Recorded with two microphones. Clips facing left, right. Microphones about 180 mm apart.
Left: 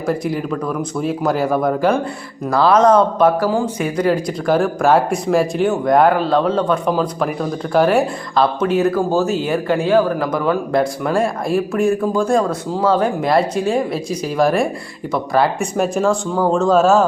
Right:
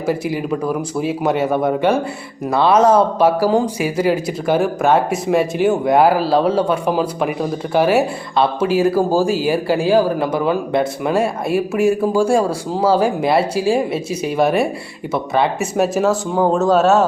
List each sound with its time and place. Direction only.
0.5 s speech: 10° right (ahead or behind)
10.0 s a man's voice: 30° right (ahead or behind)
10.7 s speech: 5° right (ahead or behind)